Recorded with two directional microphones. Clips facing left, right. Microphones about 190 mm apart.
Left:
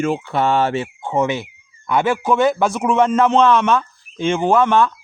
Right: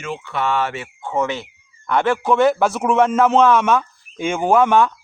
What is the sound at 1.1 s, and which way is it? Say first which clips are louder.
Speech: left 3 dB; 15° left (ahead or behind).